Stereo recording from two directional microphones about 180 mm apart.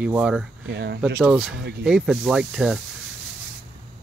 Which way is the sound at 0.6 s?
70° right (ahead or behind).